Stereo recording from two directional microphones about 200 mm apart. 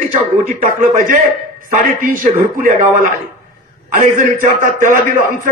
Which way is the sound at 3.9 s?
40° right (ahead or behind).